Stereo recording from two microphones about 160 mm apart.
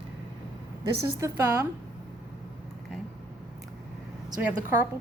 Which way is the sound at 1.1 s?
20° right (ahead or behind).